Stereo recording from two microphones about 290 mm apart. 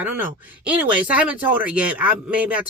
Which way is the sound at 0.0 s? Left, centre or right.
Centre.